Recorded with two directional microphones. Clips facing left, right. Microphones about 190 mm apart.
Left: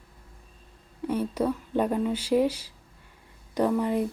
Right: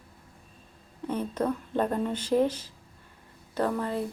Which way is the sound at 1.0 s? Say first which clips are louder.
Left 2 dB; 10° left (ahead or behind).